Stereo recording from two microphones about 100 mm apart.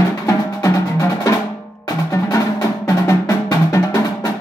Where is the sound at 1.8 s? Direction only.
35° left (ahead or behind).